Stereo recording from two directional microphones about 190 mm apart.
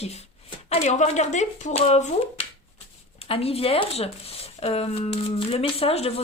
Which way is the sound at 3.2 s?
30° left (ahead or behind).